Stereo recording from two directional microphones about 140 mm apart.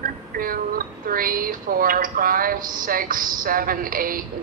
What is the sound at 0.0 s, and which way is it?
Speech, 90° right.